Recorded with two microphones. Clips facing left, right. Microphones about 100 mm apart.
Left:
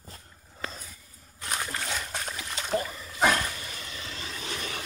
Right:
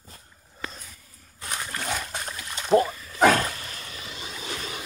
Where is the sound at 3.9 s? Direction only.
15° right (ahead or behind).